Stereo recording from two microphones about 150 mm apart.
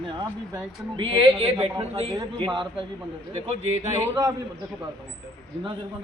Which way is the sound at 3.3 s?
45° right (ahead or behind).